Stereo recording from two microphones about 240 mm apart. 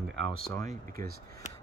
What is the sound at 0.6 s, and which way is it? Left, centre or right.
Speech, right.